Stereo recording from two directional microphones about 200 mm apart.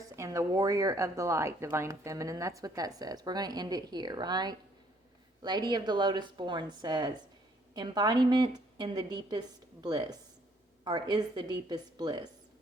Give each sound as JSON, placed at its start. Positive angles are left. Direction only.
{"t": 0.2, "sound": "a woman's voice", "side_deg": -15}